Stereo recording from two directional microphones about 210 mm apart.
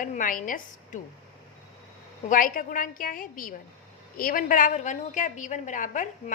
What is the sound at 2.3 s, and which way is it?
A woman's voice, 40° left (ahead or behind).